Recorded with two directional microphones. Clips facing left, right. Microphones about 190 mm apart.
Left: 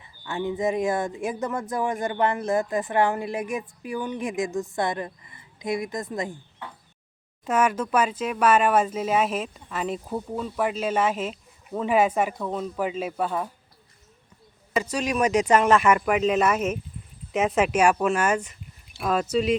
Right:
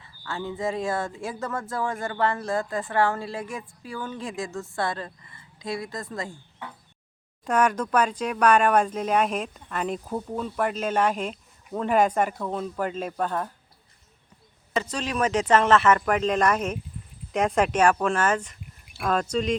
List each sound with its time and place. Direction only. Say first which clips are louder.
0.0 s speech: left 4 dB; 15° left (ahead or behind)
7.4 s speech: even; 5° left (ahead or behind)
14.8 s speech: left 2 dB; 10° left (ahead or behind)